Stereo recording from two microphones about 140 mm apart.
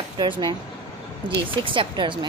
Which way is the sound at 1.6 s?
35° right (ahead or behind).